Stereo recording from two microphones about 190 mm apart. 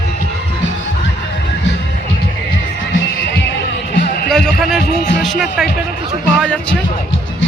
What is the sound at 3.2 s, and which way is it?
Music, 60° left (ahead or behind).